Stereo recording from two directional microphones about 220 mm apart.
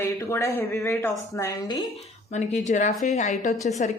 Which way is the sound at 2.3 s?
30° left (ahead or behind).